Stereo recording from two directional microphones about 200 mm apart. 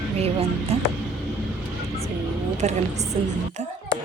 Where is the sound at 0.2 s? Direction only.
30° right (ahead or behind).